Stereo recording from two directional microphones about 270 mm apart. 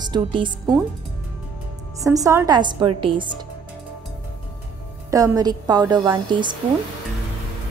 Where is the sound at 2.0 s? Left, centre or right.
Centre.